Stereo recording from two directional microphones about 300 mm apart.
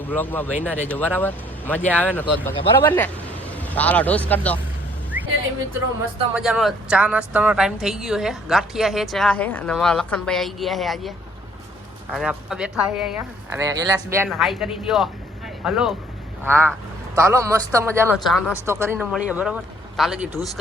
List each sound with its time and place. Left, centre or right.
0.0 s a woman's voice: centre
6.3 s a woman's voice: centre
12.1 s a woman's voice: centre